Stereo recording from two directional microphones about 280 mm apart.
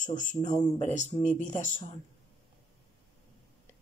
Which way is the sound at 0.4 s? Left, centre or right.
Centre.